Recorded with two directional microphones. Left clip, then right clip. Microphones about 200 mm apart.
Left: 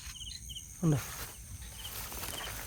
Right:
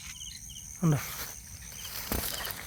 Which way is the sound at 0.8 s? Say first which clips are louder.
Right 2 dB; 10° right (ahead or behind).